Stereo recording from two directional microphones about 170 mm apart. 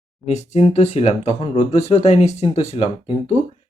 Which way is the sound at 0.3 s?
40° left (ahead or behind).